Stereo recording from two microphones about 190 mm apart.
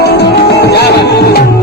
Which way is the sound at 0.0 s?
60° left (ahead or behind).